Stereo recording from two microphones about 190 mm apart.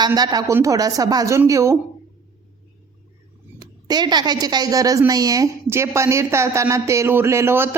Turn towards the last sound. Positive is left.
turn(degrees=-10)  # may be behind; listen again after turning